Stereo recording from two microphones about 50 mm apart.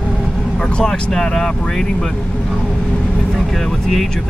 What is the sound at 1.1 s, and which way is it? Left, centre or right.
Speech, centre.